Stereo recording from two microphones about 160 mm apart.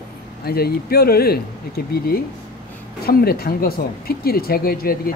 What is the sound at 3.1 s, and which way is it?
Speech, 75° left (ahead or behind).